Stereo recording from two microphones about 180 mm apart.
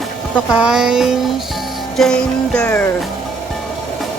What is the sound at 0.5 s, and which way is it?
Music, 5° right (ahead or behind).